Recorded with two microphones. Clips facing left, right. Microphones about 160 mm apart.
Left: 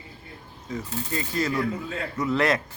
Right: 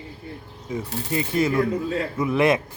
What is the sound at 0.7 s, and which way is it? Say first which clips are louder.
Speech: right 4 dB; 20° right (ahead or behind).